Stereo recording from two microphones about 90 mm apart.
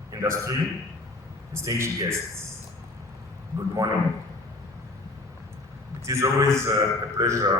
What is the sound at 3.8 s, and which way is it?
Speech, 40° right (ahead or behind).